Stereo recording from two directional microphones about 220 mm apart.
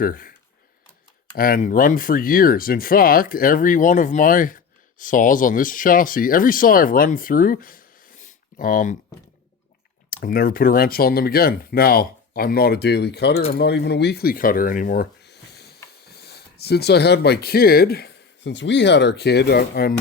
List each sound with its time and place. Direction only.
0.0 s speech: 40° left (ahead or behind)
1.4 s speech: 40° left (ahead or behind)
10.1 s speech: 40° left (ahead or behind)